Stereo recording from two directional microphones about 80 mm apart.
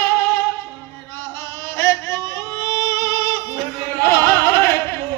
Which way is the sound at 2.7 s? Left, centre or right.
Left.